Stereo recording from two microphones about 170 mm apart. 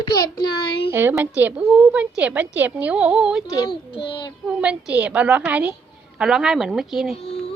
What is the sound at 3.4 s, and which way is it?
Child singing, 20° left (ahead or behind).